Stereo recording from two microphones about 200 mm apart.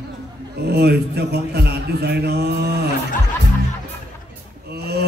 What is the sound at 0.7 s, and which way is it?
A man's voice, 55° right (ahead or behind).